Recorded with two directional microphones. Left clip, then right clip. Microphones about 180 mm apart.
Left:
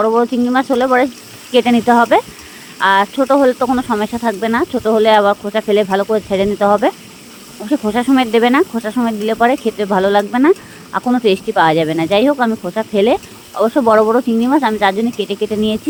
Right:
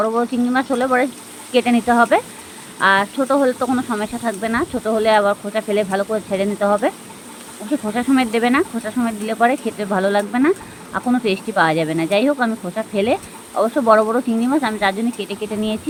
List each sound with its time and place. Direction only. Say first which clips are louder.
0.0 s speech: left 5 dB; 50° left (ahead or behind)